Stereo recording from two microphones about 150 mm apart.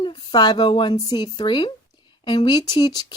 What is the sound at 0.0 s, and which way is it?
Speech, 30° left (ahead or behind).